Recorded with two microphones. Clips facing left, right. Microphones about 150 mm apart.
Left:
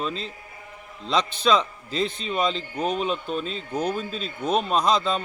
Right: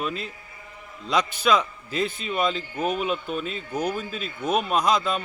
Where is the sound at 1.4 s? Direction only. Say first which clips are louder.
Left 1 dB; 5° right (ahead or behind).